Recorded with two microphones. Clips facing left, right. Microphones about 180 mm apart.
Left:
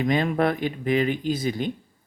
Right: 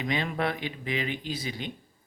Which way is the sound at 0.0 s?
50° left (ahead or behind).